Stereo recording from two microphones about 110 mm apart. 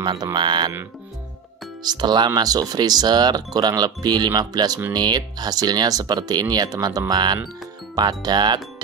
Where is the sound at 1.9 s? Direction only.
40° right (ahead or behind).